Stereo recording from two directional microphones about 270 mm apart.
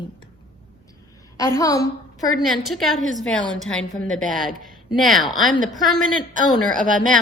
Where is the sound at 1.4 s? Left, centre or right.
Centre.